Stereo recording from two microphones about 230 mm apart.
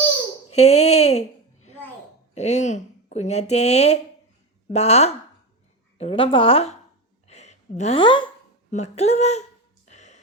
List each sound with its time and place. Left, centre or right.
0.5 s speech: left
2.3 s a woman's voice: left
7.3 s a sound: left
8.7 s a woman's voice: left
9.8 s music: left